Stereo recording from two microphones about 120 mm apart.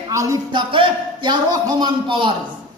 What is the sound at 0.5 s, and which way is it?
A man's voice, 45° right (ahead or behind).